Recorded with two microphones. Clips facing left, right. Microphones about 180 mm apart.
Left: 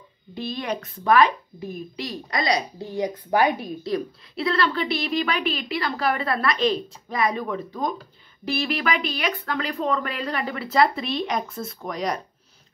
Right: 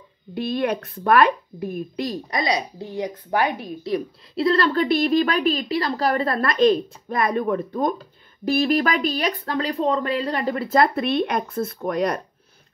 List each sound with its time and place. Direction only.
0.3 s speech: 60° right (ahead or behind)
2.3 s speech: 5° right (ahead or behind)
4.4 s speech: 40° right (ahead or behind); by 12.2 s 55° right (ahead or behind)